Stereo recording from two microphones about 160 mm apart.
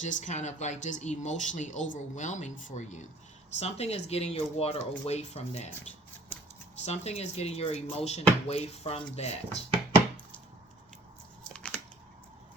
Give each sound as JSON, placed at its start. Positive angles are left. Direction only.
{"t": 0.0, "sound": "speech", "side_deg": 50}
{"t": 6.8, "sound": "speech", "side_deg": 40}
{"t": 11.4, "sound": "a sound", "side_deg": 5}